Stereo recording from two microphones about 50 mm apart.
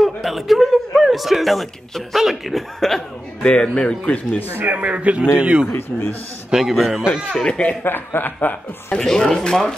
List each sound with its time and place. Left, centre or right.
0.0 s speech: centre
2.8 s speech: centre
3.4 s a man's voice: centre
4.6 s a man's voice: right
5.7 s a man's voice: left
6.5 s a man's voice: centre
7.3 s speech: centre
7.8 s a man's voice: left
9.0 s speech: centre